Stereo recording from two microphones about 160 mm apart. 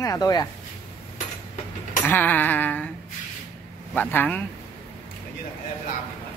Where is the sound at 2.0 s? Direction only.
10° left (ahead or behind).